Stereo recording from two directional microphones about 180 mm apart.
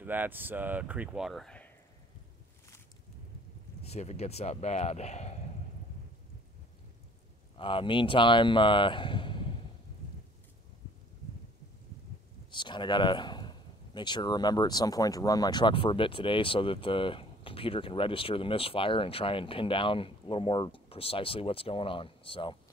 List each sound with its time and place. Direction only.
0.0 s speech: 10° right (ahead or behind)
3.8 s speech: 35° left (ahead or behind)
7.5 s speech: 30° left (ahead or behind)
12.4 s speech: 25° left (ahead or behind)